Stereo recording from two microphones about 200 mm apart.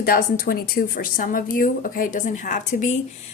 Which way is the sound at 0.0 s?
45° left (ahead or behind).